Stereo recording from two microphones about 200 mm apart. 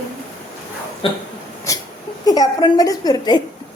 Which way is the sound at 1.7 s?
15° left (ahead or behind).